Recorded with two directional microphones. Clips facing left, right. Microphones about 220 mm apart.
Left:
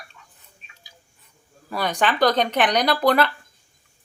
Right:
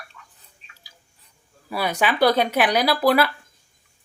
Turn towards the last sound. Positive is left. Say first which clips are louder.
# even
turn(degrees=-5)  # may be behind; listen again after turning